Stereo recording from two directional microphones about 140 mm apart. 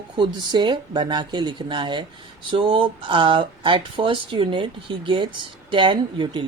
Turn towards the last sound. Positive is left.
turn(degrees=-35)  # may be behind; listen again after turning